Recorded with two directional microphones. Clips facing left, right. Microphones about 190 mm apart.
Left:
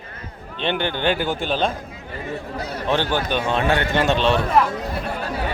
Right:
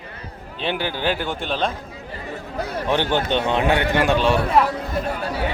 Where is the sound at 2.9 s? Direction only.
20° right (ahead or behind).